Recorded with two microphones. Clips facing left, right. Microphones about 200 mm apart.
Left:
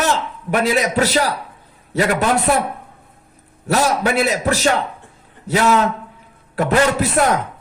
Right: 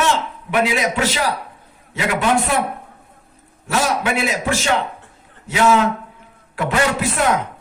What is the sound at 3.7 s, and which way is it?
A man's voice, 40° left (ahead or behind).